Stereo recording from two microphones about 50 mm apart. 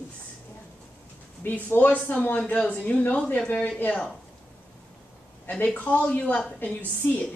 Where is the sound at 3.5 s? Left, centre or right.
Left.